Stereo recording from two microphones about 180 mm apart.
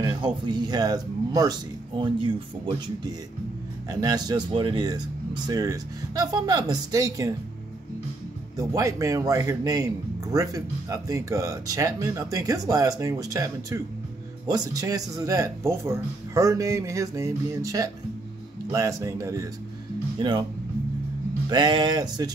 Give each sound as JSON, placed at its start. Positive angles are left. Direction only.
{"t": 0.0, "sound": "speech", "side_deg": -25}
{"t": 3.9, "sound": "speech", "side_deg": -20}
{"t": 8.5, "sound": "speech", "side_deg": -20}
{"t": 21.5, "sound": "speech", "side_deg": -25}